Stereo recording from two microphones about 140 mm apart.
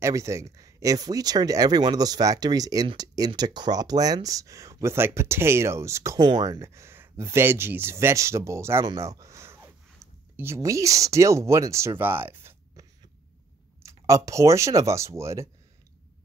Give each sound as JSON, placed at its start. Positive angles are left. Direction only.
{"t": 0.0, "sound": "speech", "side_deg": -20}
{"t": 6.1, "sound": "speech", "side_deg": -30}
{"t": 6.6, "sound": "speech", "side_deg": -20}
{"t": 9.0, "sound": "a sound", "side_deg": -20}
{"t": 10.0, "sound": "a sound", "side_deg": 0}
{"t": 10.3, "sound": "speech", "side_deg": -20}
{"t": 13.8, "sound": "speech", "side_deg": -20}